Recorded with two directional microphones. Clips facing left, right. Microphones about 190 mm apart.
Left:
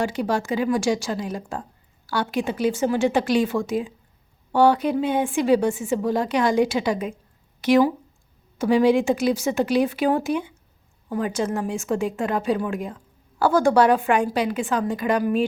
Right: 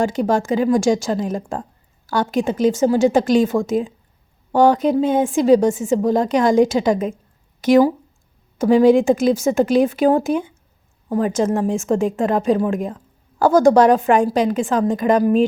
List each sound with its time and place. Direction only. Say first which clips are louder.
0.0 s a woman's voice: right 5 dB; 45° right (ahead or behind)